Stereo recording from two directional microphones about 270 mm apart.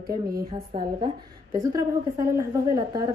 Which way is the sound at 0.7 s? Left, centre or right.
Centre.